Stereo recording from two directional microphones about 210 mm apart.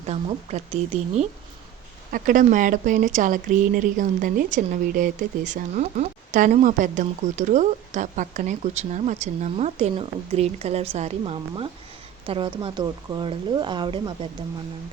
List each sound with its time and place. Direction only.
0.0 s speech: 30° right (ahead or behind)